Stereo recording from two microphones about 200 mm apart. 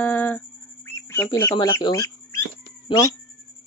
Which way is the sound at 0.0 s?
10° left (ahead or behind).